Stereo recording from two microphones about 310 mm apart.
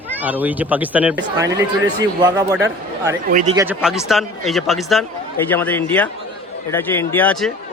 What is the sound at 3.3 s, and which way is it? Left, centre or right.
Speech, right.